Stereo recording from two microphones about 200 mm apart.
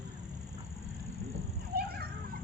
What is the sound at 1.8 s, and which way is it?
Dog, 50° right (ahead or behind).